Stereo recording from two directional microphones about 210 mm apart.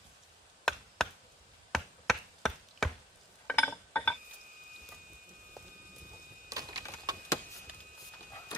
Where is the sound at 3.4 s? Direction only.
5° left (ahead or behind).